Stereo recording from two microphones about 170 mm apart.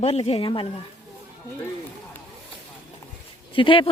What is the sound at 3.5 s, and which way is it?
Speech, 30° left (ahead or behind).